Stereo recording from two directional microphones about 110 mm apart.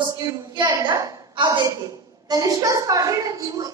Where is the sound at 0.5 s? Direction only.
40° right (ahead or behind).